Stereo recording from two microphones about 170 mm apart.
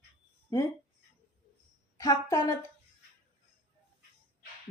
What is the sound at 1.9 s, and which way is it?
Speech, 20° left (ahead or behind).